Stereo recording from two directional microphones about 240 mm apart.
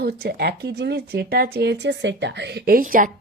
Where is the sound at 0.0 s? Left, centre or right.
Right.